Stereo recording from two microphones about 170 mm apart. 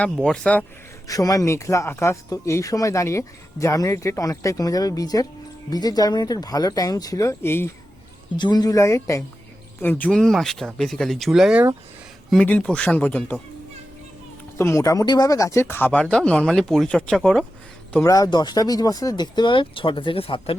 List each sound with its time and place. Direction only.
0.0 s speech: 5° left (ahead or behind)
1.0 s speech: 20° left (ahead or behind)
8.4 s speech: 25° left (ahead or behind); by 13.4 s 10° left (ahead or behind)
14.6 s speech: 15° left (ahead or behind)
17.9 s speech: 20° left (ahead or behind)